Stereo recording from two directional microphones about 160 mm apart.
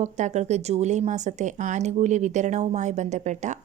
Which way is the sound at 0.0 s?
45° right (ahead or behind).